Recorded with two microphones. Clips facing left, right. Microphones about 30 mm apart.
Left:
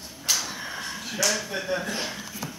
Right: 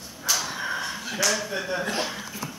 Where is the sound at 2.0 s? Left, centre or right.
Centre.